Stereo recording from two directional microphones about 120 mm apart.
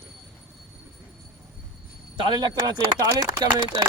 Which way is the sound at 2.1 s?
40° right (ahead or behind).